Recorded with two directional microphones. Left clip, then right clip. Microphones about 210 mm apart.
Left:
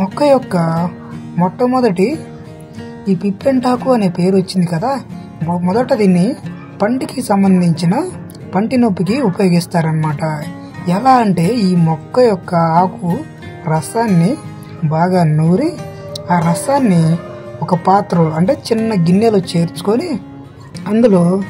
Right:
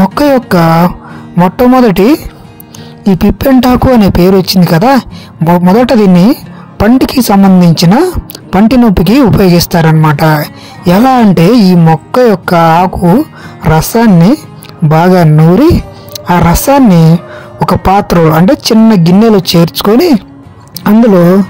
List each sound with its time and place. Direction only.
0.0 s speech: 45° right (ahead or behind)